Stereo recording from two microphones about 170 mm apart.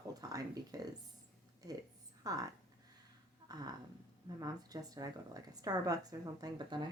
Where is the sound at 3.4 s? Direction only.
25° right (ahead or behind).